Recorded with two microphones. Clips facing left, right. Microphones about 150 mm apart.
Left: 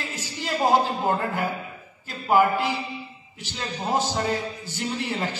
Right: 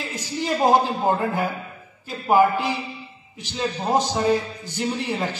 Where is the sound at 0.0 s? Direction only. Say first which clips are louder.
Right 5 dB; 15° right (ahead or behind).